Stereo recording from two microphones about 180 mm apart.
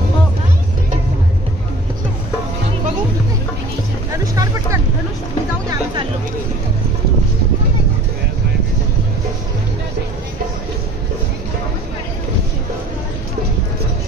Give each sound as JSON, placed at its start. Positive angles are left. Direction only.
{"t": 4.2, "sound": "music", "side_deg": -20}